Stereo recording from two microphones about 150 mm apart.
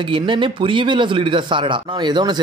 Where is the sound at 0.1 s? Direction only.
35° right (ahead or behind).